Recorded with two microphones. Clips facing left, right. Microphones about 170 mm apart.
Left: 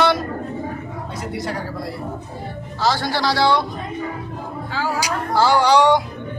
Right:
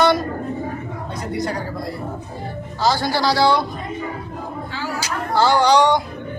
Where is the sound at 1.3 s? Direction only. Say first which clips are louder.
Right 3 dB; 5° left (ahead or behind).